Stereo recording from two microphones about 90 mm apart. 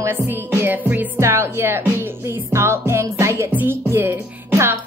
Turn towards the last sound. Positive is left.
turn(degrees=-25)  # may be behind; listen again after turning